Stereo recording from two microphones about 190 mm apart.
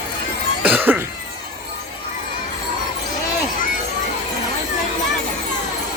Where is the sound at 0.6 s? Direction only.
10° right (ahead or behind).